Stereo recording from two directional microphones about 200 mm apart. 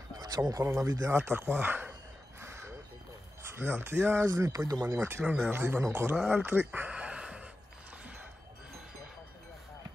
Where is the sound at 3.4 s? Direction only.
10° right (ahead or behind).